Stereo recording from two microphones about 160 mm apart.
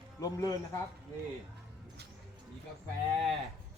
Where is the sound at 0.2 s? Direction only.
20° left (ahead or behind).